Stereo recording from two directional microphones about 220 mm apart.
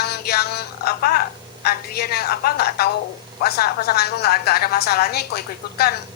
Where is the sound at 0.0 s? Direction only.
45° left (ahead or behind).